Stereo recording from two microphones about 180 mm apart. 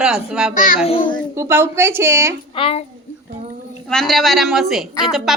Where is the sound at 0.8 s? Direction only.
30° left (ahead or behind).